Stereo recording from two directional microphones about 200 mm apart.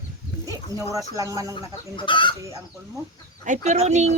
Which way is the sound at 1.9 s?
25° left (ahead or behind).